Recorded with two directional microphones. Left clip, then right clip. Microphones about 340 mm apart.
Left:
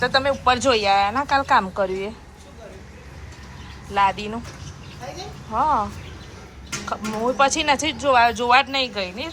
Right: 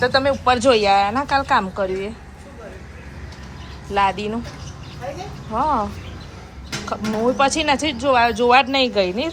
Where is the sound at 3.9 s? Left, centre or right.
Centre.